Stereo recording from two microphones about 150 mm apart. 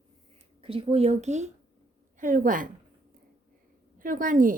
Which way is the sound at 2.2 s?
60° right (ahead or behind).